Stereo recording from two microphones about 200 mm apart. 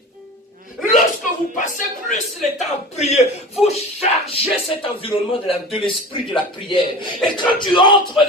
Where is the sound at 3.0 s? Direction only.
35° left (ahead or behind).